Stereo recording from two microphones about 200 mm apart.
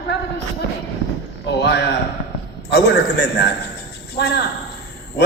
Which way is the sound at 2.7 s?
55° left (ahead or behind).